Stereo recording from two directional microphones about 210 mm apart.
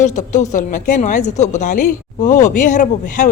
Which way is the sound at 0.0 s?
35° left (ahead or behind).